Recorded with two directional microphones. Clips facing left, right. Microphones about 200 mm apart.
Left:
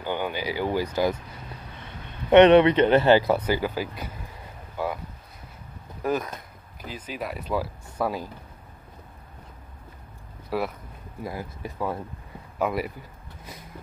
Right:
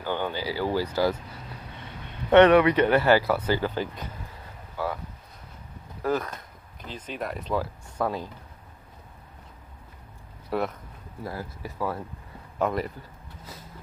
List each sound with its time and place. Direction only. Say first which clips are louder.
0.0 s speech: left 1 dB; 15° left (ahead or behind)
2.3 s speech: left 2 dB; 25° left (ahead or behind)
6.0 s speech: even; 15° left (ahead or behind)
10.5 s speech: even; 5° left (ahead or behind)
11.2 s speech: left 1 dB; 20° left (ahead or behind)
12.5 s speech: even; 10° left (ahead or behind)
13.4 s vehicle: left 1 dB; 15° left (ahead or behind)